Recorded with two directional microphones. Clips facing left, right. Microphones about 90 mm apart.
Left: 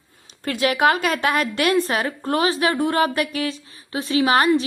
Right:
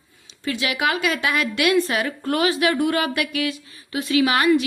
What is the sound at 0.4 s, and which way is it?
A woman's voice, 45° left (ahead or behind).